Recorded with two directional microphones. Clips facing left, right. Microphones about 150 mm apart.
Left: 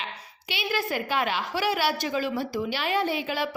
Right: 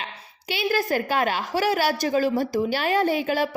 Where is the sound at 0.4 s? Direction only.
40° right (ahead or behind).